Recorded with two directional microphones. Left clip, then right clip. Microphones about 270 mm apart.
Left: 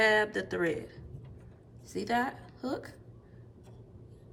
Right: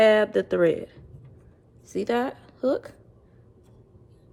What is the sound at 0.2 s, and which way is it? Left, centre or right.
A woman's voice, centre.